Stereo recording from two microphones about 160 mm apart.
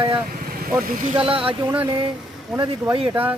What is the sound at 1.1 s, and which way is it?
Speech, 35° right (ahead or behind).